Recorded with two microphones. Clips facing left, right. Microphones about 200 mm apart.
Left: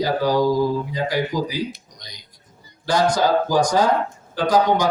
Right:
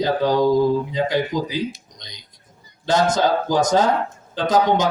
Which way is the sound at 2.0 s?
20° right (ahead or behind).